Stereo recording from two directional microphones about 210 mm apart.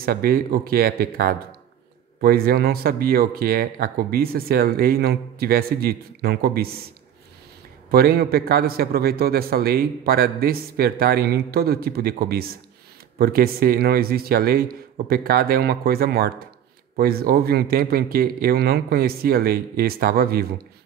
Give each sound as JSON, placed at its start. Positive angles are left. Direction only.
{"t": 0.0, "sound": "speech", "side_deg": -45}
{"t": 7.9, "sound": "speech", "side_deg": -45}